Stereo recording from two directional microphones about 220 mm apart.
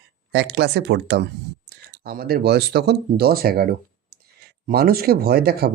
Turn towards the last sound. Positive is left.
turn(degrees=-45)  # may be behind; listen again after turning